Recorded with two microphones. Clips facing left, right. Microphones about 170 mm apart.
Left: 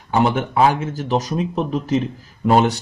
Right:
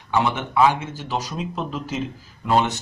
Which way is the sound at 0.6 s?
40° left (ahead or behind).